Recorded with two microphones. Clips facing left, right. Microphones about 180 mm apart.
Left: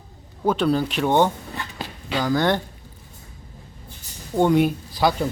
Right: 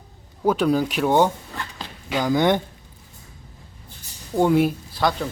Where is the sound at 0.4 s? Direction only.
10° right (ahead or behind).